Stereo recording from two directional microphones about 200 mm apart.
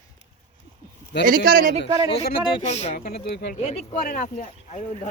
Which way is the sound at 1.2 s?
45° right (ahead or behind).